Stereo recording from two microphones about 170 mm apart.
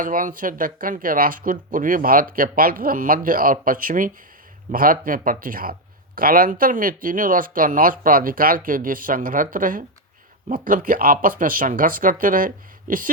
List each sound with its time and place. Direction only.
0.0 s speech: 55° right (ahead or behind)